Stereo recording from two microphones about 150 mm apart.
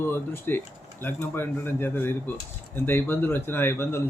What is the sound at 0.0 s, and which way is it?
Speech, 15° left (ahead or behind).